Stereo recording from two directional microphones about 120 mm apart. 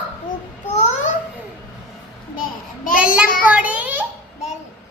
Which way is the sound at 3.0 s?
10° right (ahead or behind).